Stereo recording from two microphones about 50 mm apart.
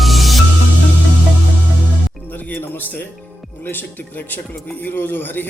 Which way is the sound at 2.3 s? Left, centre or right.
Left.